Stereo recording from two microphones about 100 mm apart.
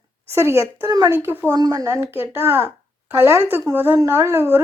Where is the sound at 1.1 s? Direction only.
20° right (ahead or behind).